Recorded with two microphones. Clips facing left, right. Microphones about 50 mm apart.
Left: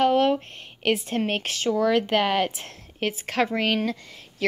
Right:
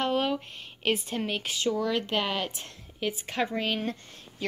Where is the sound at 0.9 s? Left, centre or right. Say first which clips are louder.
Left 5 dB; left.